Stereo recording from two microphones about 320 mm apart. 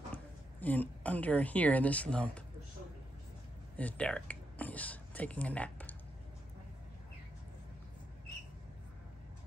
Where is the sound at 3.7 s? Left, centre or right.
Centre.